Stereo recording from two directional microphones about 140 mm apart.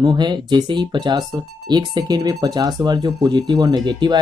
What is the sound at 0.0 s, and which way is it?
Speech, 30° right (ahead or behind).